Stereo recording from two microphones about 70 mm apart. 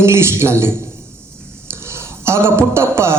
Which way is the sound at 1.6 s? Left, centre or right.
Right.